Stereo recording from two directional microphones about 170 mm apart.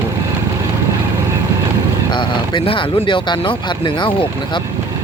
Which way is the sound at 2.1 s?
30° left (ahead or behind).